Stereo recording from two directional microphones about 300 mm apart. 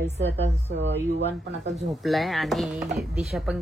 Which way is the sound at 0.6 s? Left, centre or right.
Right.